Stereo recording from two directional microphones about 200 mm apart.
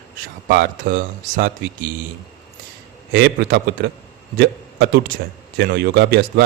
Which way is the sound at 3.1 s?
50° right (ahead or behind).